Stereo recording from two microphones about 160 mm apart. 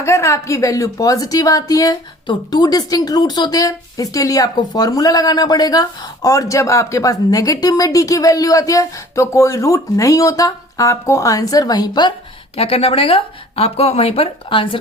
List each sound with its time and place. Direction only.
0.0 s a woman's voice: 15° left (ahead or behind)
12.5 s speech: 35° left (ahead or behind)